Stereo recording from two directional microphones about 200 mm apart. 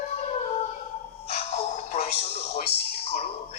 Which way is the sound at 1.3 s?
30° left (ahead or behind).